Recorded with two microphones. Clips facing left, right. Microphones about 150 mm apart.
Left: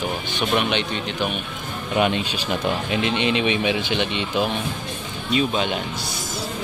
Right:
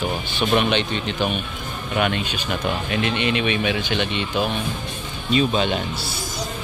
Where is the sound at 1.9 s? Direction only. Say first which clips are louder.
Left 2 dB; 25° left (ahead or behind).